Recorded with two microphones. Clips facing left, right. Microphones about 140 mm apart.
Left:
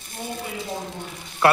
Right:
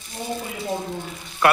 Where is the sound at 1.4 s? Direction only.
30° left (ahead or behind).